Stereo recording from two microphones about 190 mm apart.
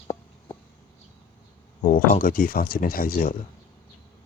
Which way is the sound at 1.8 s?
40° left (ahead or behind).